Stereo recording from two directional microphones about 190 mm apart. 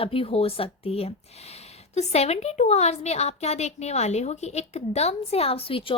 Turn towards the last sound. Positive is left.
turn(degrees=30)  # may be behind; listen again after turning